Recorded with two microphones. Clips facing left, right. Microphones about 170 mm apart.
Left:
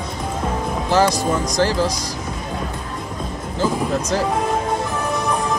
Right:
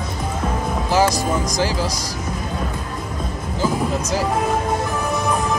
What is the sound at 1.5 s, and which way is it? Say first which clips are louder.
Speech: left 3 dB; 10° right (ahead or behind).